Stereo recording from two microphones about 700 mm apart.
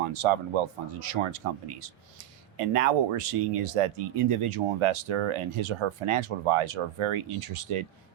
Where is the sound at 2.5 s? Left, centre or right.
Right.